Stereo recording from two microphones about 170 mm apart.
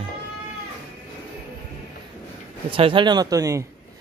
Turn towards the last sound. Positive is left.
turn(degrees=-20)  # may be behind; listen again after turning